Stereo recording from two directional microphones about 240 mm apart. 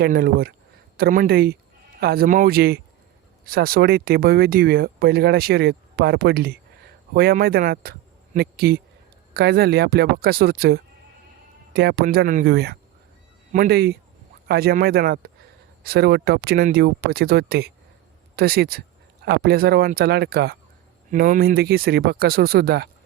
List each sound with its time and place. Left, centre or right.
0.0 s speech: right